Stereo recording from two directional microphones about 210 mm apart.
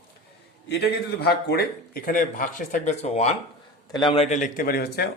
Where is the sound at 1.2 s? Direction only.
50° left (ahead or behind).